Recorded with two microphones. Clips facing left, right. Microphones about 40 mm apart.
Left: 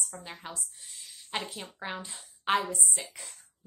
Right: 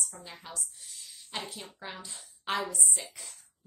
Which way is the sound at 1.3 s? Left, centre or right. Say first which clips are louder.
Left 3 dB; centre.